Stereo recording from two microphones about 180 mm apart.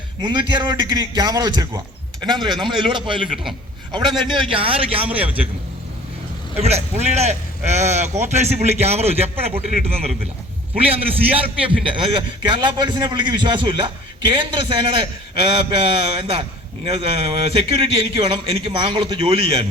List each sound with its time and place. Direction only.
0.2 s a man's voice: 25° right (ahead or behind)
4.3 s speech: 30° right (ahead or behind)
6.6 s a man's voice: 35° right (ahead or behind)